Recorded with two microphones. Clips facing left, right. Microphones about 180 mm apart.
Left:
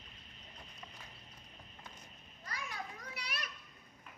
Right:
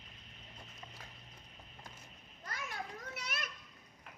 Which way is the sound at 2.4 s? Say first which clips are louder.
Right 1 dB; 50° right (ahead or behind).